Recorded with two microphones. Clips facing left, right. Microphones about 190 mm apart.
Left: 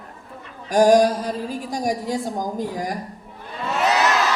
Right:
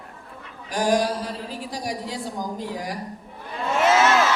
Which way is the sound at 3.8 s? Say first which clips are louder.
Right 2 dB; 35° left (ahead or behind).